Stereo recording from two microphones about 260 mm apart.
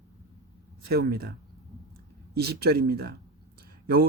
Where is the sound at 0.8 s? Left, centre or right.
Right.